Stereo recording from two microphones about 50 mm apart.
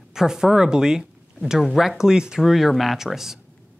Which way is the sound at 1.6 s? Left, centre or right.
Centre.